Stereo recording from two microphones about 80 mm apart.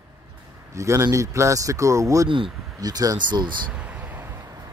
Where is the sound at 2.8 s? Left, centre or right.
Right.